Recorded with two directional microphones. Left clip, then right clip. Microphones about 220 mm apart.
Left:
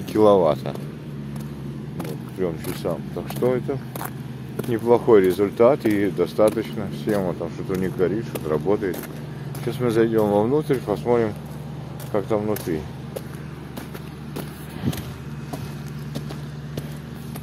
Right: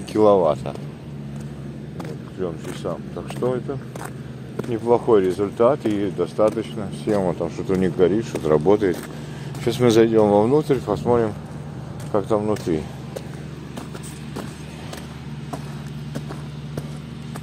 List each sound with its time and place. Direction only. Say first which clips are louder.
0.1 s speech: even; 5° left (ahead or behind)
2.0 s speech: left 2 dB; 10° left (ahead or behind)
7.2 s speech: right 4 dB; 35° right (ahead or behind)
10.1 s speech: right 3 dB; 25° right (ahead or behind)
10.9 s speech: right 1 dB; 10° right (ahead or behind)